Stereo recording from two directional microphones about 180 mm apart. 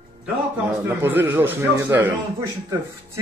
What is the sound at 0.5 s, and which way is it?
Speech, 10° right (ahead or behind).